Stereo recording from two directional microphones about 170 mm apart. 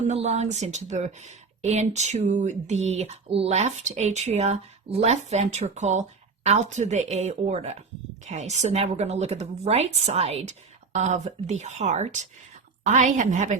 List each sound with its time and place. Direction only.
0.0 s speech: 40° right (ahead or behind)